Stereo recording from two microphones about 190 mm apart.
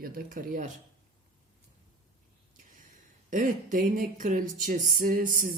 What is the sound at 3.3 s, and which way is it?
Speech, 45° right (ahead or behind).